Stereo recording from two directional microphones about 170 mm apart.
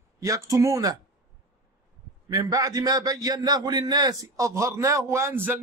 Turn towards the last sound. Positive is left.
turn(degrees=-15)  # may be behind; listen again after turning